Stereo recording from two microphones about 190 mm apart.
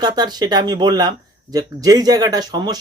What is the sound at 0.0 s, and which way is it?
Speech, 20° right (ahead or behind).